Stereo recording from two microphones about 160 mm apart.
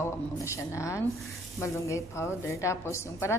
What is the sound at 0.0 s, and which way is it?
A woman's voice, 15° left (ahead or behind).